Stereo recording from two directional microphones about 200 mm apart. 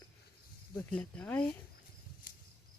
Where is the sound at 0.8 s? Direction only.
5° left (ahead or behind).